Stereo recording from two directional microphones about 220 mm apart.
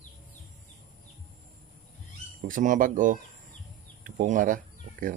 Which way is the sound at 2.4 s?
35° right (ahead or behind).